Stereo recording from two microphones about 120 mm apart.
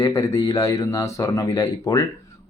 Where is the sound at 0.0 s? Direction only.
30° left (ahead or behind).